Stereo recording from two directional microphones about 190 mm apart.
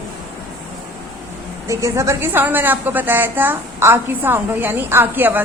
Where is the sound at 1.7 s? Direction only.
15° right (ahead or behind).